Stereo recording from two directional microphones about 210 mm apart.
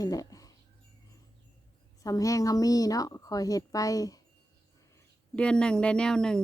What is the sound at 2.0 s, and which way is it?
Speech, 15° left (ahead or behind).